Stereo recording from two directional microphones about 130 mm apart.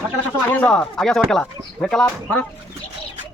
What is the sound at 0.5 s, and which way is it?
Speech, 10° left (ahead or behind).